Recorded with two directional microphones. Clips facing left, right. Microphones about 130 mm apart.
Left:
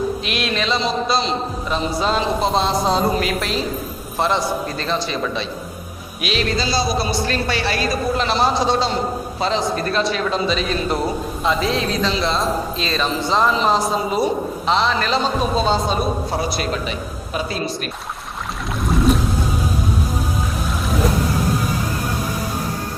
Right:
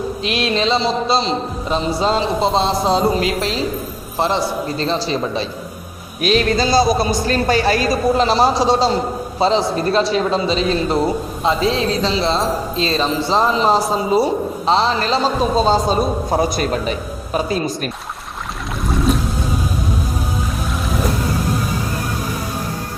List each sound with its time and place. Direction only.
0.2 s speech: 30° right (ahead or behind)
6.2 s a man's voice: 45° right (ahead or behind)